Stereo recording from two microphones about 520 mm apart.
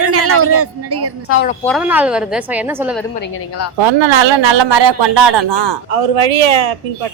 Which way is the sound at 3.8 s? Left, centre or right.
Right.